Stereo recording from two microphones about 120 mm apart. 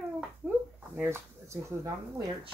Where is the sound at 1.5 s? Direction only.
25° right (ahead or behind).